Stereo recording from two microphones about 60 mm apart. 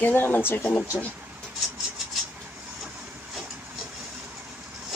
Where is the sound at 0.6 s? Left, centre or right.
Centre.